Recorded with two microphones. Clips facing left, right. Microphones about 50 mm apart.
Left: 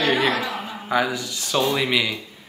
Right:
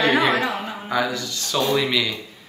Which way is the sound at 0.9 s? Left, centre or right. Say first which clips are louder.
Left 1 dB; centre.